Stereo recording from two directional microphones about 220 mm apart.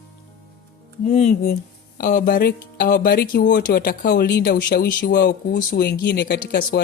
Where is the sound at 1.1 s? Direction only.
35° left (ahead or behind).